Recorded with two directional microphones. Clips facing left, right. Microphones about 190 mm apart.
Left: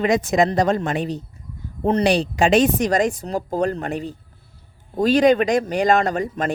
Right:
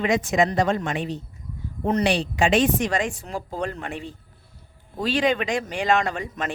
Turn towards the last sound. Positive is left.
turn(degrees=40)  # may be behind; listen again after turning